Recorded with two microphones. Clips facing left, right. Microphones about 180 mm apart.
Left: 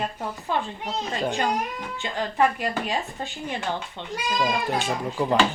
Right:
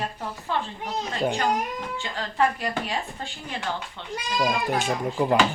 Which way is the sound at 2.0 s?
20° left (ahead or behind).